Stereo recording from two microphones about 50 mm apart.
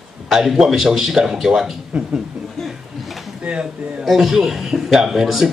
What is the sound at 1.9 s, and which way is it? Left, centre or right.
Speech, centre.